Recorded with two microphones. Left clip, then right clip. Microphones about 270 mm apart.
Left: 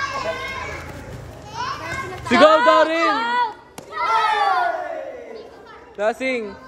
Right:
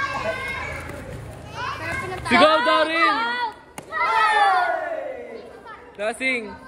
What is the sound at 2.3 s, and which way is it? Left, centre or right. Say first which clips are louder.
A man's voice: left 4 dB; left.